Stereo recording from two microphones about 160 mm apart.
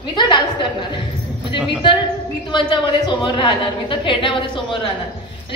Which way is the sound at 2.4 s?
30° left (ahead or behind).